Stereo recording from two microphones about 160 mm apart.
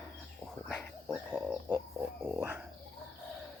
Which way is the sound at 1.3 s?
10° right (ahead or behind).